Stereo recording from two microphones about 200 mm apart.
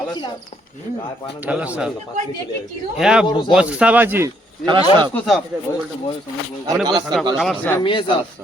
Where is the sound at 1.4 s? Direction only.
5° right (ahead or behind).